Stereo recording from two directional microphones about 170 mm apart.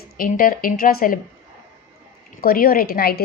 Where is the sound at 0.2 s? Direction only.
55° left (ahead or behind).